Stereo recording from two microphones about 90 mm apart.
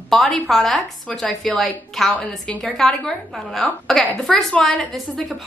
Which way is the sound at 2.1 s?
15° left (ahead or behind).